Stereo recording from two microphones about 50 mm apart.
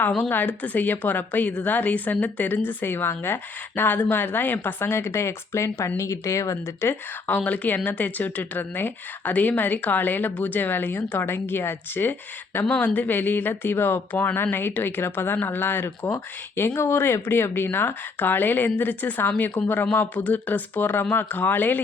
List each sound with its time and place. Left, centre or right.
0.3 s speech: left
4.9 s speech: left
6.0 s speech: left
6.8 s speech: left
7.3 s speech: left
12.6 s speech: left
16.1 s speech: left